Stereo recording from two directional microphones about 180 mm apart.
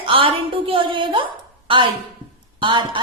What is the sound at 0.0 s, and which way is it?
A woman's voice, 30° right (ahead or behind).